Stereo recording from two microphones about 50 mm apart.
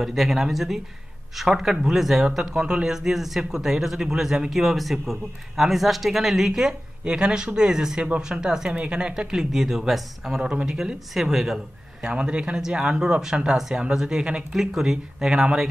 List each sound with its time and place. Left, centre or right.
0.0 s speech: centre
9.3 s speech: centre